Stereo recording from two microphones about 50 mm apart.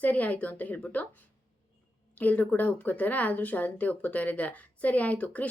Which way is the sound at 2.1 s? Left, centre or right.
Left.